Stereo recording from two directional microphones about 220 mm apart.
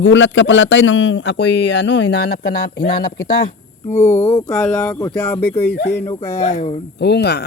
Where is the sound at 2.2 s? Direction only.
45° left (ahead or behind).